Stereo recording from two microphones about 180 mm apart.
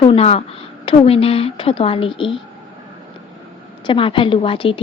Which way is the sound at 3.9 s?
30° left (ahead or behind).